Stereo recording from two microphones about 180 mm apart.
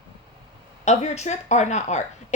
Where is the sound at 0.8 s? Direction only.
40° left (ahead or behind).